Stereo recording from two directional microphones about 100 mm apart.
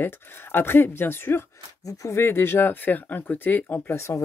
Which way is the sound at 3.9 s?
30° left (ahead or behind).